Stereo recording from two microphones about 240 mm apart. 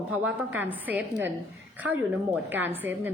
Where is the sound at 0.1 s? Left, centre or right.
Centre.